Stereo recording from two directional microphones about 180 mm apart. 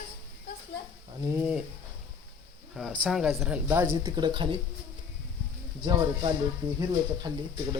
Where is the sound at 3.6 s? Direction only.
15° right (ahead or behind).